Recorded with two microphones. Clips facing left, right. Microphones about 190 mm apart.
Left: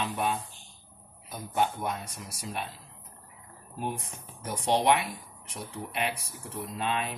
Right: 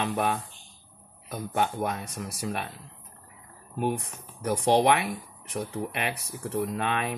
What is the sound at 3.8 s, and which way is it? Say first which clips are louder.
Speech: right 6 dB; 65° right (ahead or behind).